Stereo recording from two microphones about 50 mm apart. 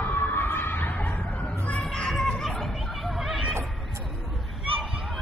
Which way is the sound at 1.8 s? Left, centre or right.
Centre.